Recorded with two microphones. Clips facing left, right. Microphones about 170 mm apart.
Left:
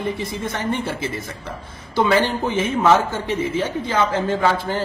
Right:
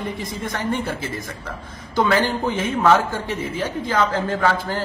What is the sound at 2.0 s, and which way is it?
Speech, 15° left (ahead or behind).